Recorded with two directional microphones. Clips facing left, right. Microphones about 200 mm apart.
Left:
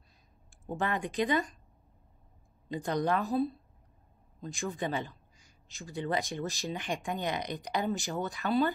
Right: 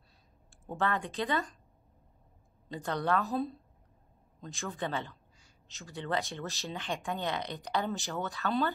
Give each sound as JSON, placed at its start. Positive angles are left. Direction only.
{"t": 0.7, "sound": "a man's voice", "side_deg": 15}
{"t": 2.7, "sound": "a man's voice", "side_deg": 15}